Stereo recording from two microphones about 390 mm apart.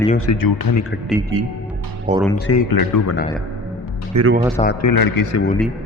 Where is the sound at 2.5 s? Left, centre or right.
Left.